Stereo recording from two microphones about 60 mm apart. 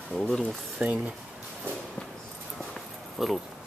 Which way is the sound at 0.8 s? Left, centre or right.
Right.